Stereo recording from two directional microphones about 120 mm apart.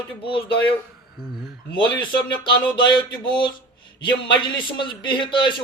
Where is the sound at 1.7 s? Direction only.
40° left (ahead or behind).